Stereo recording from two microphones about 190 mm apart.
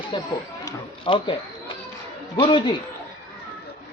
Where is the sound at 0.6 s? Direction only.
25° left (ahead or behind).